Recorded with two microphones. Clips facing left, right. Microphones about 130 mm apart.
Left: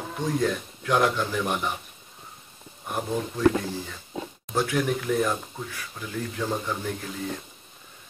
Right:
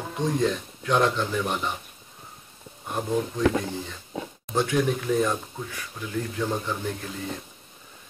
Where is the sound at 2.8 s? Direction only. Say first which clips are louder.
Right 2 dB; 10° left (ahead or behind).